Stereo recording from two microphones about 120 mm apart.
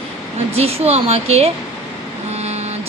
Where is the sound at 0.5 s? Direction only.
60° right (ahead or behind).